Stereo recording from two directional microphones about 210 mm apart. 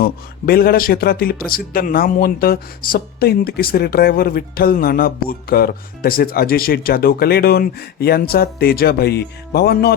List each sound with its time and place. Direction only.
0.0 s speech: 45° left (ahead or behind)